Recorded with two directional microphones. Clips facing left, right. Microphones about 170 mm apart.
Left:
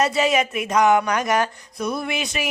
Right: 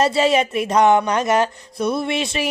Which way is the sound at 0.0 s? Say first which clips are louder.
Right 3 dB; 30° right (ahead or behind).